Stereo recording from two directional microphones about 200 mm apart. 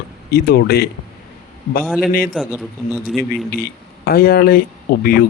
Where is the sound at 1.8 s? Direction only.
Centre (ahead or behind).